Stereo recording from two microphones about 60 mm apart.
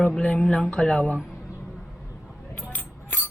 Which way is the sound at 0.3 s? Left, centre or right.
Centre.